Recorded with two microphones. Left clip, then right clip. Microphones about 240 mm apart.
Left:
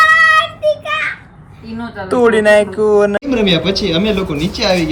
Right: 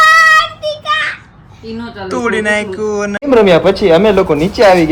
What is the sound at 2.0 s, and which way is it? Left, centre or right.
Speech, centre.